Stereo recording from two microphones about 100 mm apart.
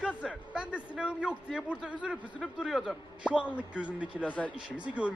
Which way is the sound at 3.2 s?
10° right (ahead or behind).